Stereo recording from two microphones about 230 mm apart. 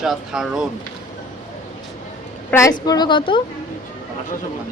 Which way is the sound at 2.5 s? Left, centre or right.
Centre.